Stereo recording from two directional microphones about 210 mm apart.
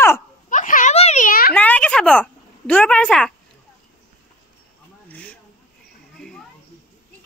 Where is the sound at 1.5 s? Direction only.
10° left (ahead or behind).